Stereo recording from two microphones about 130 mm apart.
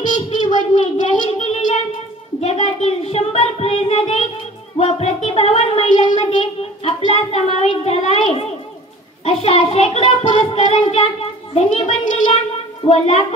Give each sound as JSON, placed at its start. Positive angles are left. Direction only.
{"t": 0.0, "sound": "a sound", "side_deg": 70}
{"t": 2.4, "sound": "child singing", "side_deg": 50}
{"t": 4.7, "sound": "a sound", "side_deg": 55}
{"t": 6.0, "sound": "child singing", "side_deg": 65}
{"t": 6.9, "sound": "a child's voice", "side_deg": 45}
{"t": 11.5, "sound": "a child's voice", "side_deg": 60}
{"t": 12.8, "sound": "a child's voice", "side_deg": 55}